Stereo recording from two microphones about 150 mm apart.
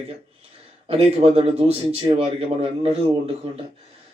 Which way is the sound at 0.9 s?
40° right (ahead or behind).